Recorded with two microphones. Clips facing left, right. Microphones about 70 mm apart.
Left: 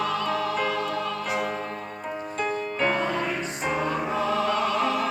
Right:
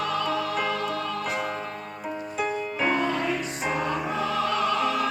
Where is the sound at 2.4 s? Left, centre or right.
Centre.